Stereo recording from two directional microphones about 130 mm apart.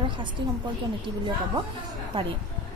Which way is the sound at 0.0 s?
40° right (ahead or behind).